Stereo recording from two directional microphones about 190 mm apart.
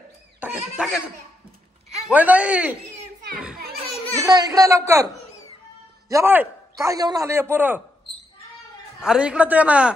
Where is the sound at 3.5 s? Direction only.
55° right (ahead or behind).